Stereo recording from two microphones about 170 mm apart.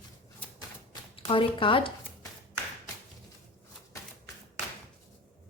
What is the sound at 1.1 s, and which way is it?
Speech, 30° left (ahead or behind).